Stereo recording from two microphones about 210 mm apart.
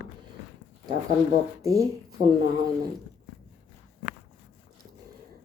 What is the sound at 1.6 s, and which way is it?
Speech, 15° right (ahead or behind).